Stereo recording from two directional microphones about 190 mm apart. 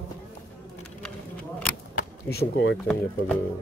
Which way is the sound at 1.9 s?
55° left (ahead or behind).